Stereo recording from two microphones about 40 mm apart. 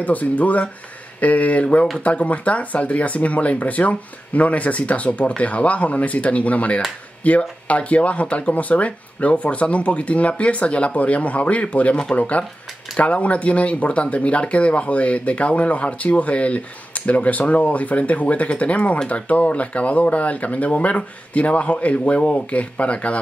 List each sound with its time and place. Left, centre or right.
0.0 s speech: left